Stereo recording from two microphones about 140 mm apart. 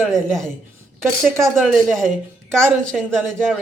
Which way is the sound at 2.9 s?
5° left (ahead or behind).